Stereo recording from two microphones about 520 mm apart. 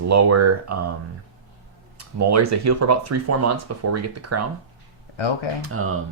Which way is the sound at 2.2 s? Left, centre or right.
Right.